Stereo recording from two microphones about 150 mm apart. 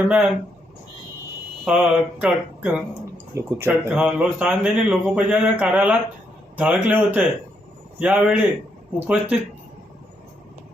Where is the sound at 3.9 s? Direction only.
5° right (ahead or behind).